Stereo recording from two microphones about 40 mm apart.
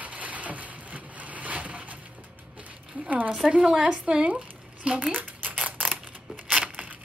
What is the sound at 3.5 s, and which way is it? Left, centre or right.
Speech, right.